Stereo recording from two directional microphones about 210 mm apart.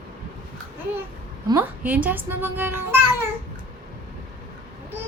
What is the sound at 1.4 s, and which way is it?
Speech, 10° right (ahead or behind).